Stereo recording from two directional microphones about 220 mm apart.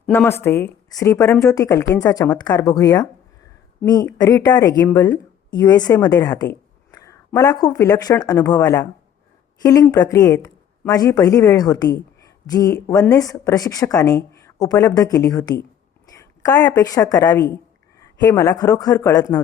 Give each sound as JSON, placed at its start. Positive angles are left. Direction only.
{"t": 0.0, "sound": "a woman's voice", "side_deg": 5}